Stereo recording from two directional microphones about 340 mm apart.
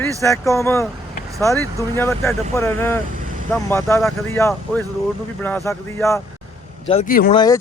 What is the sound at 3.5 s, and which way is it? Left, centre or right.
Speech, centre.